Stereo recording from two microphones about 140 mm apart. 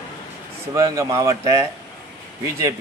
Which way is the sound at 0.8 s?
25° right (ahead or behind).